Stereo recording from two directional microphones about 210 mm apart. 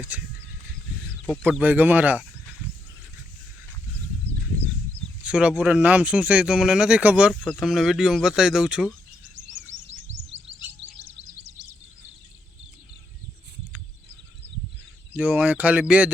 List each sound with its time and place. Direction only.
0.1 s speech: 10° right (ahead or behind)
1.5 s speech: 10° right (ahead or behind)
5.2 s speech: 5° right (ahead or behind)
9.2 s chirp: 60° right (ahead or behind)
10.9 s music: 55° right (ahead or behind)
15.1 s speech: 10° right (ahead or behind)